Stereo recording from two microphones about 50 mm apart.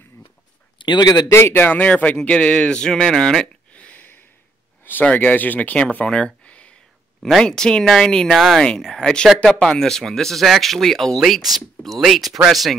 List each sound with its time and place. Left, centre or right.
1.5 s speech: left; by 3.4 s centre
3.7 s a sound: left
5.0 s speech: left
6.1 s a sound: left
7.4 s speech: centre
8.4 s speech: centre
8.6 s speech: centre
11.7 s a sound: centre
12.0 s speech: centre